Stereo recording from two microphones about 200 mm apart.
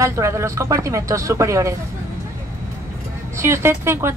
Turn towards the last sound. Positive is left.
turn(degrees=-10)  # may be behind; listen again after turning